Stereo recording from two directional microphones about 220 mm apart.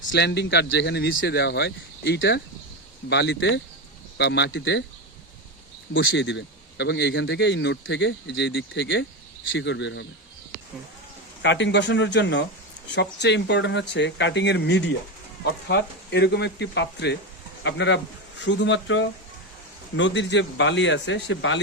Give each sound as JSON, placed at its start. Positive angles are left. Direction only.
{"t": 0.1, "sound": "speech", "side_deg": 50}
{"t": 5.9, "sound": "speech", "side_deg": 60}
{"t": 11.4, "sound": "speech", "side_deg": 55}